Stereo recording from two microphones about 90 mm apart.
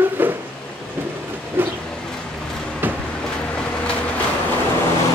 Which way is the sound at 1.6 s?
25° right (ahead or behind).